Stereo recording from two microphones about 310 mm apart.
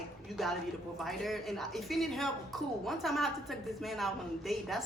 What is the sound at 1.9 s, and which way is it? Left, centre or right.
A woman's voice, centre.